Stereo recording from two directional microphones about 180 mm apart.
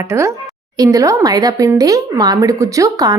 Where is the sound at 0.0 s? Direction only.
15° right (ahead or behind).